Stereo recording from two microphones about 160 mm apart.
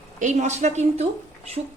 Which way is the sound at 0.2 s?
50° right (ahead or behind).